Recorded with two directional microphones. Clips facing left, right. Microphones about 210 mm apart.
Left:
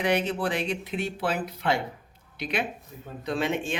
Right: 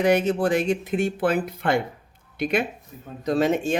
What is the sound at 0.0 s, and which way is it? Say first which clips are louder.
Speech: right 6 dB; 45° right (ahead or behind).